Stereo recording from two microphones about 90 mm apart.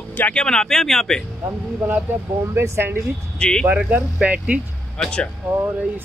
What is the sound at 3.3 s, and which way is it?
Speech, 10° left (ahead or behind).